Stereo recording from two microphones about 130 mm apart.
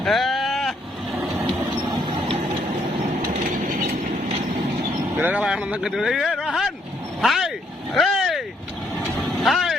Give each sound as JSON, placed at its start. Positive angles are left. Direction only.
{"t": 0.0, "sound": "a sound", "side_deg": 0}
{"t": 1.9, "sound": "printer", "side_deg": -40}
{"t": 5.1, "sound": "vehicle", "side_deg": -15}